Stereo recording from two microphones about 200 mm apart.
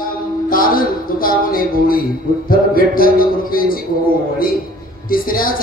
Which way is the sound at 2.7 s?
45° left (ahead or behind).